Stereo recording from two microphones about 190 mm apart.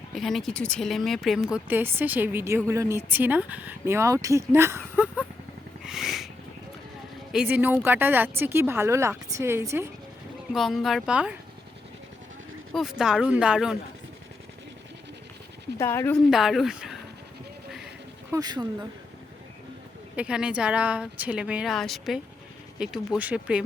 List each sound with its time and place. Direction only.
0.1 s speech: centre (ahead or behind)
5.8 s a sound: centre (ahead or behind)
7.3 s speech: 10° right (ahead or behind)
10.5 s speech: centre (ahead or behind)
12.7 s speech: centre (ahead or behind)
15.8 s speech: 15° left (ahead or behind)
16.1 s speech: centre (ahead or behind)
17.7 s a sound: centre (ahead or behind)
18.3 s speech: 20° right (ahead or behind)
20.1 s speech: 5° right (ahead or behind)